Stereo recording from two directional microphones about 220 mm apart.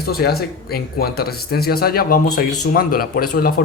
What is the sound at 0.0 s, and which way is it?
Speech, 45° left (ahead or behind).